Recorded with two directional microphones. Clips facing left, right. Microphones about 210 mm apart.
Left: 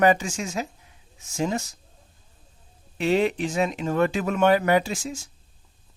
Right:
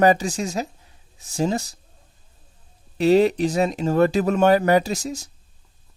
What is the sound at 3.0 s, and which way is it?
Speech, 40° right (ahead or behind).